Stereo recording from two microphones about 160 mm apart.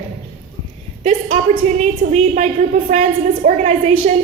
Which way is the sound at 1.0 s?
45° right (ahead or behind).